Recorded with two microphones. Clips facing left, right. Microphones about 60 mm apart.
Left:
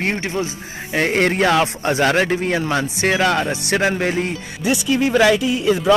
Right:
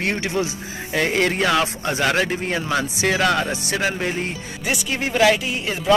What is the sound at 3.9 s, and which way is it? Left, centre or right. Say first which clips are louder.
Speech: left 4 dB; left.